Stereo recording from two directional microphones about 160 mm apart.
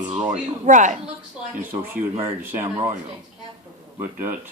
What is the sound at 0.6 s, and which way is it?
Speech, 50° right (ahead or behind).